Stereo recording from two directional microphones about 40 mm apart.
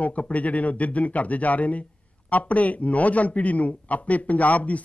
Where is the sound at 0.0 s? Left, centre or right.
Left.